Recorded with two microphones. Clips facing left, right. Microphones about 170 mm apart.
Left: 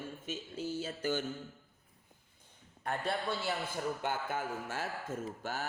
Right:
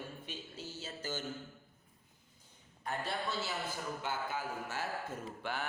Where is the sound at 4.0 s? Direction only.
50° left (ahead or behind).